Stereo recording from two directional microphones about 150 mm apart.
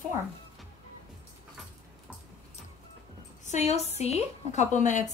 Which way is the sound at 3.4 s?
50° left (ahead or behind).